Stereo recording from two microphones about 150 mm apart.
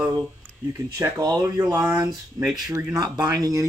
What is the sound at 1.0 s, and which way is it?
Speech, 25° right (ahead or behind).